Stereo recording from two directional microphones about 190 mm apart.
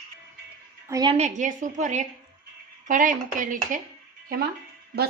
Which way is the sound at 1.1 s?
40° right (ahead or behind).